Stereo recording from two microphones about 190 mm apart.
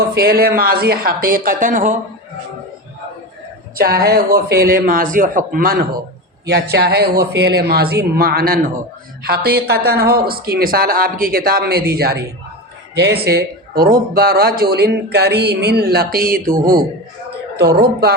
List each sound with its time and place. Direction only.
0.1 s a woman's voice: 55° right (ahead or behind)
3.8 s a woman's voice: 50° right (ahead or behind)